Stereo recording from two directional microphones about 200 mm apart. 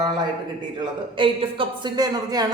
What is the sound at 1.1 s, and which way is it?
Speech, 25° right (ahead or behind).